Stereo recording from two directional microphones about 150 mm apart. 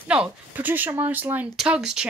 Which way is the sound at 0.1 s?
10° right (ahead or behind).